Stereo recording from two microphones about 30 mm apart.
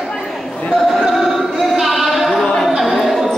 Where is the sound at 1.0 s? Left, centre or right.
Centre.